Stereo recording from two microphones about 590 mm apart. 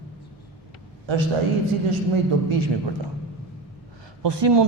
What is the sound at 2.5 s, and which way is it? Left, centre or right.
Speech, right.